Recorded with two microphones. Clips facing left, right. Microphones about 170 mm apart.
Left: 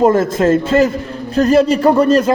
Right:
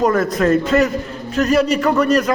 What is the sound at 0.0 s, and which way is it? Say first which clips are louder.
A man's voice: left 4 dB; 25° left (ahead or behind).